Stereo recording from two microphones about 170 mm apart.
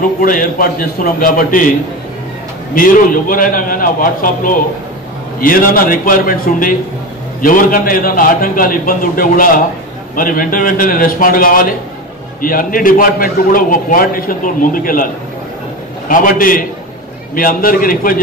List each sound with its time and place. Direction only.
0.2 s a man's voice: 55° left (ahead or behind)
2.7 s a man's voice: 55° left (ahead or behind)
16.1 s a man's voice: 55° left (ahead or behind)